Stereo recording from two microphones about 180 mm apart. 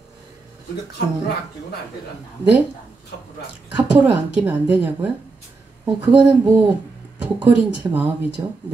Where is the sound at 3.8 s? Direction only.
10° right (ahead or behind).